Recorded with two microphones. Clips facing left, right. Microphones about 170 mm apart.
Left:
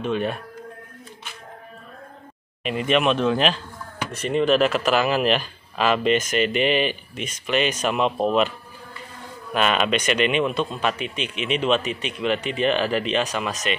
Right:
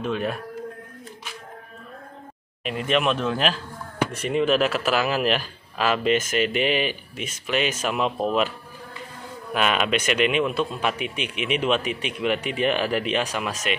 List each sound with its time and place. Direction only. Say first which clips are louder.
0.0 s speech: left 2 dB; centre (ahead or behind)
2.6 s speech: left 2 dB; centre (ahead or behind)